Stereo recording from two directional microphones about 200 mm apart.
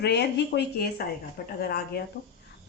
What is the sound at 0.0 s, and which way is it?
Speech, 55° left (ahead or behind).